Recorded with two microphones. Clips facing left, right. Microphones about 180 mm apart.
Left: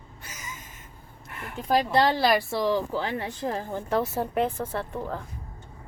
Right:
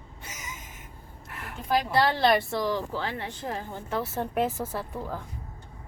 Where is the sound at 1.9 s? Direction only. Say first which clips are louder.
Left 1 dB; 20° left (ahead or behind).